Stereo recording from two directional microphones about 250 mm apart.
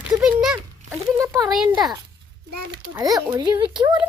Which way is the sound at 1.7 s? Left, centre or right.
Centre.